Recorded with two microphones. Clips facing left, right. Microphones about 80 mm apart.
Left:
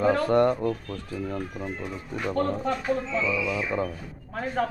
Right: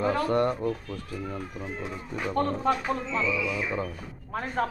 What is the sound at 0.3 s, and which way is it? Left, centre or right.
Speech, left.